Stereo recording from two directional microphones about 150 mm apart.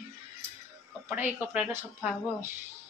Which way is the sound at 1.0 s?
10° right (ahead or behind).